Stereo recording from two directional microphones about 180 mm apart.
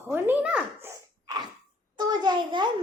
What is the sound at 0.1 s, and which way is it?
Speech, 10° right (ahead or behind).